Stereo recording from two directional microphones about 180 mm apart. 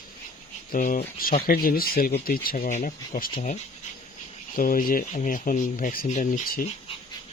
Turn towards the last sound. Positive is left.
turn(degrees=50)  # may be behind; listen again after turning